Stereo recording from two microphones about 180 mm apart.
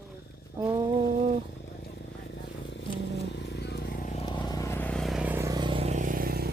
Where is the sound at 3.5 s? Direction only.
65° left (ahead or behind).